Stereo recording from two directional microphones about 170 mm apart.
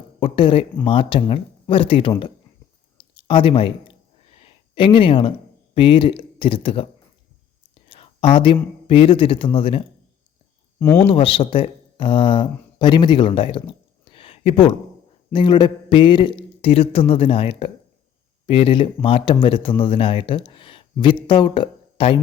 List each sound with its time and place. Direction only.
0.2 s a man's voice: 30° left (ahead or behind)
3.0 s a sound: 30° left (ahead or behind)
5.7 s a man's voice: 30° left (ahead or behind)
7.9 s whispering: 30° left (ahead or behind)
8.9 s a man's voice: 30° left (ahead or behind)
10.8 s speech: 15° left (ahead or behind)
11.0 s a man's voice: 30° left (ahead or behind)